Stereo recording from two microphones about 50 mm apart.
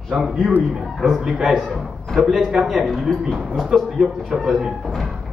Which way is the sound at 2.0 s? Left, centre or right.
Centre.